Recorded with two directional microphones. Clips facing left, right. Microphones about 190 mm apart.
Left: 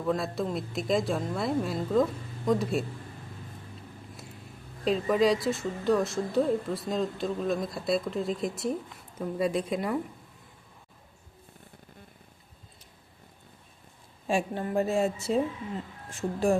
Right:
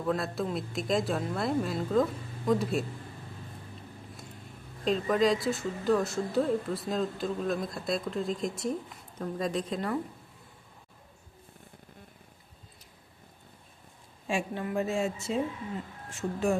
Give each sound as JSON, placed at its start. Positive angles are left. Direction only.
{"t": 0.1, "sound": "a woman's voice", "side_deg": 0}
{"t": 4.9, "sound": "a woman's voice", "side_deg": 0}
{"t": 14.3, "sound": "a woman's voice", "side_deg": 35}